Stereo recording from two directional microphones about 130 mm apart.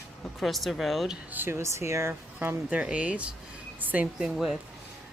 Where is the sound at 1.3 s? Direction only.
15° right (ahead or behind).